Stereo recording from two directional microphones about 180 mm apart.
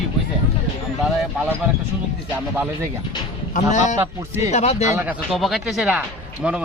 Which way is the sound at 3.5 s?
40° left (ahead or behind).